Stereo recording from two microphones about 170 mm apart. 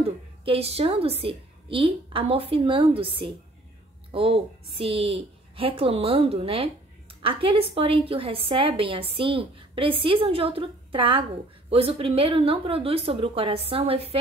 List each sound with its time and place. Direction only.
0.0 s a woman's voice: 35° right (ahead or behind)